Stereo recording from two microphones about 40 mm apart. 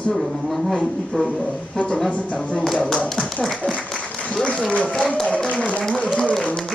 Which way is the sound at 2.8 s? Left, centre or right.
Left.